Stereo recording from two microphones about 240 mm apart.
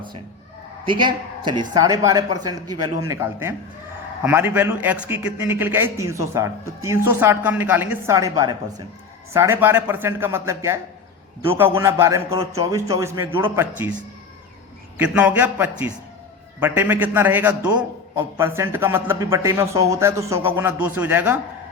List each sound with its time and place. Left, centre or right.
1.5 s a man's voice: centre
14.9 s a man's voice: centre